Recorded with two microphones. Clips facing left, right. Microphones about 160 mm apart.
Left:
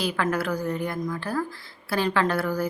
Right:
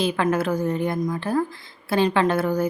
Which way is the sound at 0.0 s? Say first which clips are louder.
Right 4 dB; 20° right (ahead or behind).